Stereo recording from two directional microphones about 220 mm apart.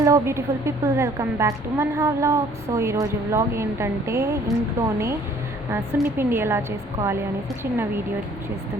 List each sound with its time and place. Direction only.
0.0 s a woman's voice: 15° right (ahead or behind)